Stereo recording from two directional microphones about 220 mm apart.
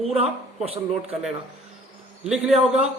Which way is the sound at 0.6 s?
25° right (ahead or behind).